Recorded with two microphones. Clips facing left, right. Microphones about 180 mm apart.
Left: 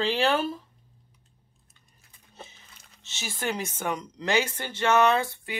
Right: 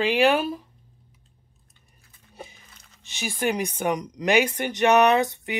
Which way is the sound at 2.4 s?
15° right (ahead or behind).